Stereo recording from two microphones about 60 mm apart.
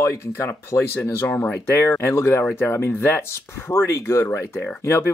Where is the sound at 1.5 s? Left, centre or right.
Left.